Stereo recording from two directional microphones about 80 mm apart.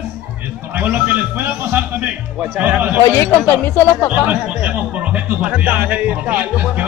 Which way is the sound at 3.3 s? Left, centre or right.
Centre.